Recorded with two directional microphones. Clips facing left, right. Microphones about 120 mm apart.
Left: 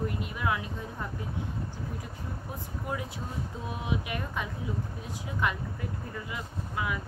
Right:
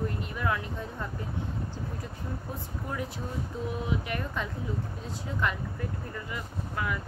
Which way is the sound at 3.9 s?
15° left (ahead or behind).